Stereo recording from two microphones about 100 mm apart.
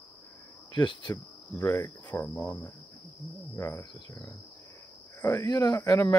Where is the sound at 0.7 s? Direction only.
50° left (ahead or behind).